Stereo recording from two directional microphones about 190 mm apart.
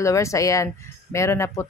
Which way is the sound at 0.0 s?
15° left (ahead or behind).